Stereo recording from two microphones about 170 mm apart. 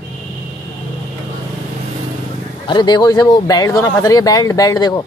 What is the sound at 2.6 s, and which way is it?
Speech, 25° left (ahead or behind).